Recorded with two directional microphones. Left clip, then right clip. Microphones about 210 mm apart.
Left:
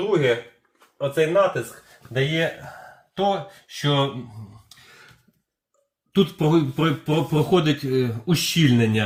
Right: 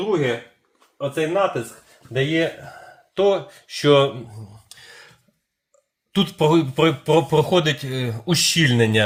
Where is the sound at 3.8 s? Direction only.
60° right (ahead or behind).